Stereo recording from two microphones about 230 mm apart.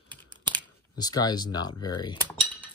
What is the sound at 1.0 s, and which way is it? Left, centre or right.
Speech, centre.